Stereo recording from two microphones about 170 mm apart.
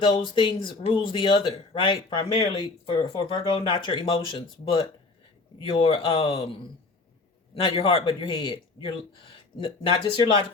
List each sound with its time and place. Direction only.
0.0 s speech: 30° left (ahead or behind)